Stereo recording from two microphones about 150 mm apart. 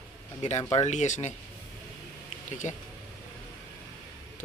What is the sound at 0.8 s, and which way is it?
Speech, 55° left (ahead or behind).